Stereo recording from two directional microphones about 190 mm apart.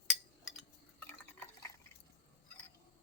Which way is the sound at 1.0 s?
10° left (ahead or behind).